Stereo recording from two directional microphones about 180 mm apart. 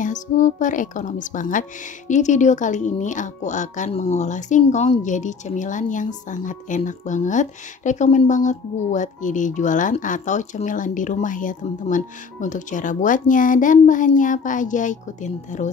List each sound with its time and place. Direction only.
0.0 s speech: 45° left (ahead or behind)